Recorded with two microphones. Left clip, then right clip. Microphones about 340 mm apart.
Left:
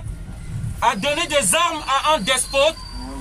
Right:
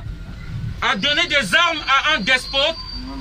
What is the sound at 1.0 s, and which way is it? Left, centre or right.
A man's voice, centre.